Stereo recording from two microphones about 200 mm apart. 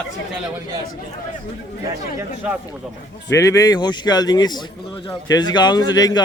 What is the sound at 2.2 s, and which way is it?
Speech, 10° right (ahead or behind).